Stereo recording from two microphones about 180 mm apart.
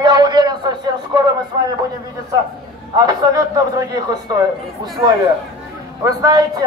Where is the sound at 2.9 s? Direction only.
20° right (ahead or behind).